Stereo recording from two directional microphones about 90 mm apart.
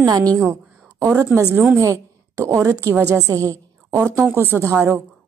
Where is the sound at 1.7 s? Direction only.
35° right (ahead or behind).